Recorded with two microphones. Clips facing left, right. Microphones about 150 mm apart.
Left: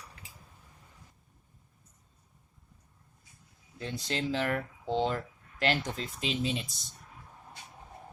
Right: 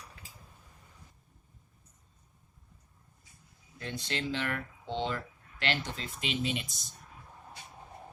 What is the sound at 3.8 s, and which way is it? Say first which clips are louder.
Speech: left 2 dB; 35° left (ahead or behind).